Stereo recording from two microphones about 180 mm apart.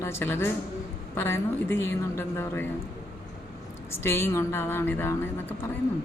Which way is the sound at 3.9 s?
15° left (ahead or behind).